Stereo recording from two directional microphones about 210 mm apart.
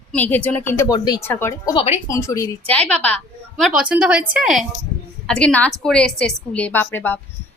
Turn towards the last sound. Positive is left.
turn(degrees=10)  # may be behind; listen again after turning